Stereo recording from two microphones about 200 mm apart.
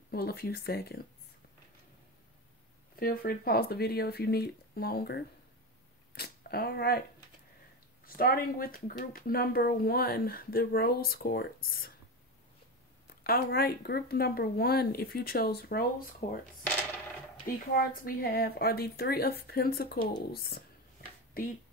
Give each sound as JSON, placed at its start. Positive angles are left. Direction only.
{"t": 0.1, "sound": "speech", "side_deg": 50}
{"t": 3.0, "sound": "speech", "side_deg": 45}
{"t": 6.1, "sound": "a sound", "side_deg": 50}
{"t": 8.0, "sound": "speech", "side_deg": 45}
{"t": 13.0, "sound": "speech", "side_deg": 50}
{"t": 17.7, "sound": "speech", "side_deg": 45}